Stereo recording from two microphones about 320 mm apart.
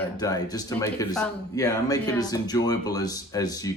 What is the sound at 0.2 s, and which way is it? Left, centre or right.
Speech, centre.